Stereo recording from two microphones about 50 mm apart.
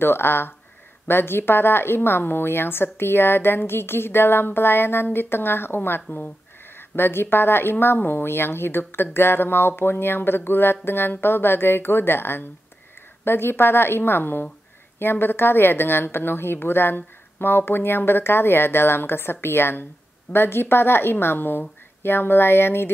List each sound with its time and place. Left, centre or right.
0.0 s a woman's voice: left